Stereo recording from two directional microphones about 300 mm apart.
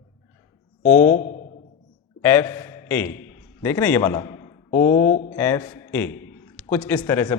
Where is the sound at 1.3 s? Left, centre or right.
Left.